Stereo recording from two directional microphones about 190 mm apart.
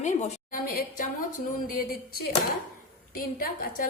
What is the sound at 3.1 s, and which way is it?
Speech, 50° left (ahead or behind).